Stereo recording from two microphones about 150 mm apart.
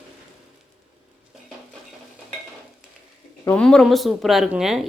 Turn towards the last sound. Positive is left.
turn(degrees=-5)  # may be behind; listen again after turning